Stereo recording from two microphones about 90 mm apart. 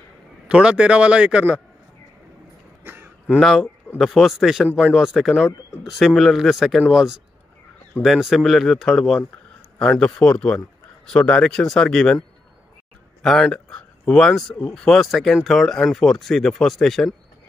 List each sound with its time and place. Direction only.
0.5 s speech: 10° right (ahead or behind)
2.8 s throat clearing: 20° right (ahead or behind)
3.3 s speech: centre (ahead or behind)
13.2 s speech: 5° left (ahead or behind)